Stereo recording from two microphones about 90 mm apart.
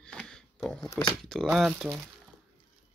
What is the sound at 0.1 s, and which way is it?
Pig, 10° left (ahead or behind).